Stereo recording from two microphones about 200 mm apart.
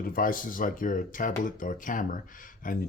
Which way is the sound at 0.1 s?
45° left (ahead or behind).